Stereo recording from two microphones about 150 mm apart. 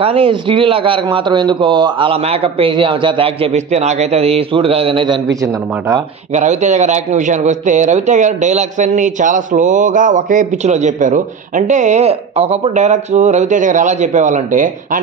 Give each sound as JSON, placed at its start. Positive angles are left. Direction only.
{"t": 0.0, "sound": "a man's voice", "side_deg": -40}
{"t": 6.3, "sound": "a man's voice", "side_deg": -55}